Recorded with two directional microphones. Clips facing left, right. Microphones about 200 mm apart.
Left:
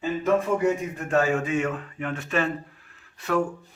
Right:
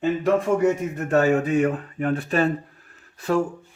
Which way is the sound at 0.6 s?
40° right (ahead or behind).